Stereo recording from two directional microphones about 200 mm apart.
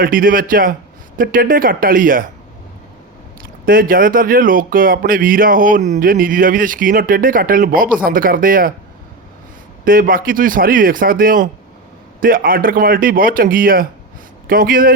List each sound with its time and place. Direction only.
0.0 s speech: 45° right (ahead or behind)
3.7 s speech: 45° right (ahead or behind)
9.8 s speech: 45° right (ahead or behind)